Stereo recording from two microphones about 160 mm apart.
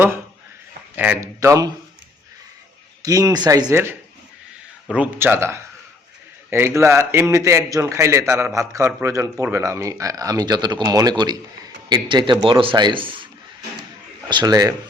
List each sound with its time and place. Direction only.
0.9 s speech: 10° right (ahead or behind)
3.0 s a man's voice: 20° right (ahead or behind)
4.9 s a man's voice: 15° right (ahead or behind); by 13.2 s 30° right (ahead or behind)
14.3 s a man's voice: 25° right (ahead or behind)